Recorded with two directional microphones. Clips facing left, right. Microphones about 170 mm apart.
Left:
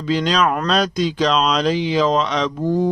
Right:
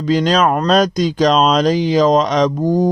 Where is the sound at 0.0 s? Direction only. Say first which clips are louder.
Right 4 dB; 40° right (ahead or behind).